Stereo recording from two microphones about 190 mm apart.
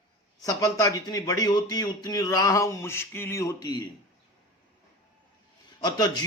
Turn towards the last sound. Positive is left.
turn(degrees=20)  # may be behind; listen again after turning